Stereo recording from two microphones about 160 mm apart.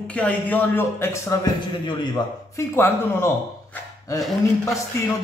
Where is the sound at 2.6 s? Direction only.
15° left (ahead or behind).